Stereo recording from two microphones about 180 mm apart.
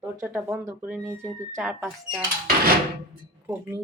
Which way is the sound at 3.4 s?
10° right (ahead or behind).